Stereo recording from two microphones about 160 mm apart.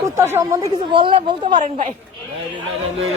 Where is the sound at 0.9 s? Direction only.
30° right (ahead or behind).